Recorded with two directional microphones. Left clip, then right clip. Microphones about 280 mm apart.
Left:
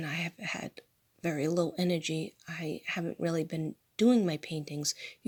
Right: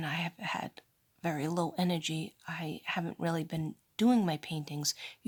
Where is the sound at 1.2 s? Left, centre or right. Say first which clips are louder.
Left 3 dB; right.